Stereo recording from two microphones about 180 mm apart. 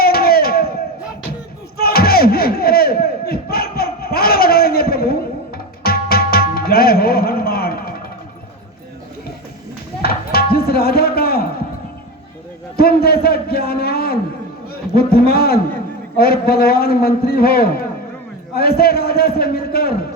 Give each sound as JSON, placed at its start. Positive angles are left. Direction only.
{"t": 0.0, "sound": "crowd", "side_deg": 60}
{"t": 1.8, "sound": "crowd", "side_deg": 60}
{"t": 5.8, "sound": "tabla", "side_deg": 60}
{"t": 10.0, "sound": "music", "side_deg": 60}
{"t": 12.7, "sound": "a sound", "side_deg": 60}
{"t": 16.1, "sound": "a man's voice", "side_deg": 60}